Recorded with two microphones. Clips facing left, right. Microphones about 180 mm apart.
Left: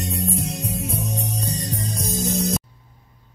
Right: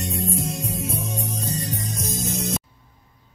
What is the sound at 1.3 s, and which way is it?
Music, 35° left (ahead or behind).